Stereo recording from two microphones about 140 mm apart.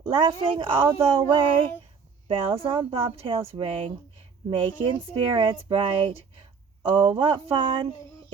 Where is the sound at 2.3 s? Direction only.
40° right (ahead or behind).